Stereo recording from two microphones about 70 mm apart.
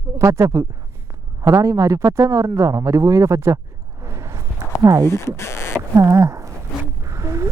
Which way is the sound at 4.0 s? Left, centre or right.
Right.